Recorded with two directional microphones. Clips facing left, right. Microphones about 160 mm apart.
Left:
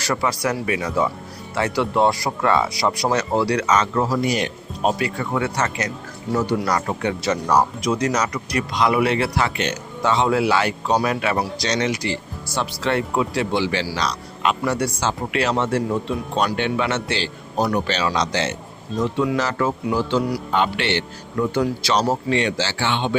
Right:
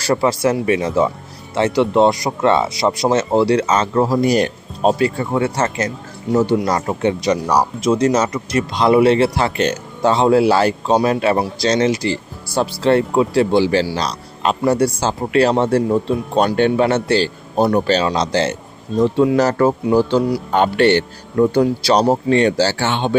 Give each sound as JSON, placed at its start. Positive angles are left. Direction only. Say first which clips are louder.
{"t": 0.0, "sound": "speech", "louder": "right 6 dB", "side_deg": -30}
{"t": 7.8, "sound": "a man's voice", "louder": "right 6 dB", "side_deg": -25}
{"t": 17.6, "sound": "a man's voice", "louder": "right 6 dB", "side_deg": -25}
{"t": 19.4, "sound": "a man's voice", "louder": "right 7 dB", "side_deg": -40}